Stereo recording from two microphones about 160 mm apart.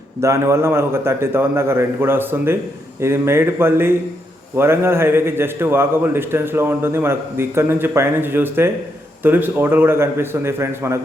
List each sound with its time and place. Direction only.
0.2 s a man's voice: 15° right (ahead or behind)